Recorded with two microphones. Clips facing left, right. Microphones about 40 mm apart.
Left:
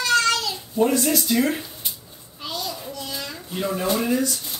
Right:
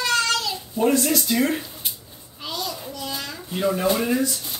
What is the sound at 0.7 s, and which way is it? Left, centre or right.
Speech, centre.